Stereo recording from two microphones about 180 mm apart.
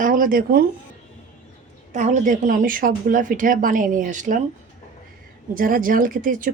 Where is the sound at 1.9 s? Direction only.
40° right (ahead or behind).